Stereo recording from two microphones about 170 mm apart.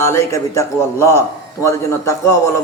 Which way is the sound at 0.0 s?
15° left (ahead or behind).